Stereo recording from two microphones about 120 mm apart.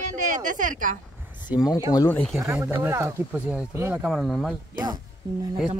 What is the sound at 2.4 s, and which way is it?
Speech, 20° right (ahead or behind).